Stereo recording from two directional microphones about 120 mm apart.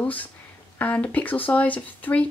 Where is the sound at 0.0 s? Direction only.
15° left (ahead or behind).